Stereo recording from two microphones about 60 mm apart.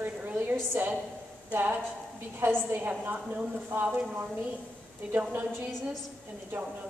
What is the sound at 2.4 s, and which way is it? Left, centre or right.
Speech, right.